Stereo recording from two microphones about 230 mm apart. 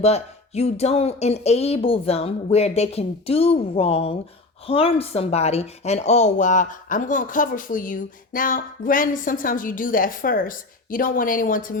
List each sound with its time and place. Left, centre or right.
0.0 s speech: left